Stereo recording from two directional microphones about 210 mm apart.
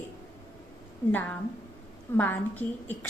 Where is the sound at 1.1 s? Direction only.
10° left (ahead or behind).